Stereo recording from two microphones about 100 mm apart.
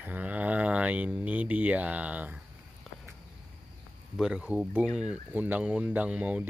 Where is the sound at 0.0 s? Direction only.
15° right (ahead or behind).